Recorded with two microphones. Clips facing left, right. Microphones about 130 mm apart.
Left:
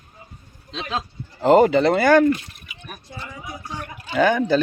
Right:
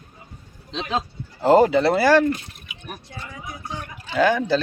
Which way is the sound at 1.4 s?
5° right (ahead or behind).